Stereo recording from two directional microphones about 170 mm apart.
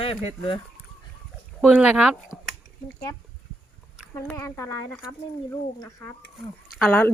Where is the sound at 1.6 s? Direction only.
5° right (ahead or behind).